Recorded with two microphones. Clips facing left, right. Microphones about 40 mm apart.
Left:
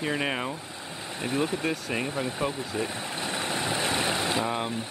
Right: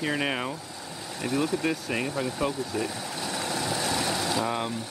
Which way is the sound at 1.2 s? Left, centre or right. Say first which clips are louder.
Right 1 dB; left.